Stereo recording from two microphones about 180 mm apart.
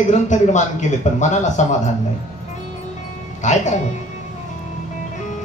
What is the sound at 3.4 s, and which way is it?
Speech, 45° left (ahead or behind).